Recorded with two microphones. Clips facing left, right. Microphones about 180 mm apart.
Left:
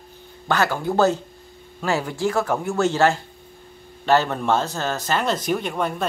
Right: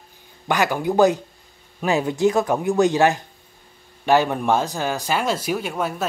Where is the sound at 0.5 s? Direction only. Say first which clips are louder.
Right 1 dB; 15° right (ahead or behind).